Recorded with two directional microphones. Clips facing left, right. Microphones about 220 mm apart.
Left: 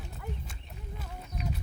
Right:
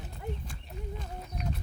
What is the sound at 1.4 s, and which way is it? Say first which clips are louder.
Run: even; centre (ahead or behind).